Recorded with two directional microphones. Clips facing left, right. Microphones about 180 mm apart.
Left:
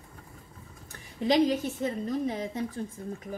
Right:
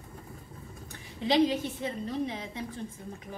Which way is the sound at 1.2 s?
45° left (ahead or behind).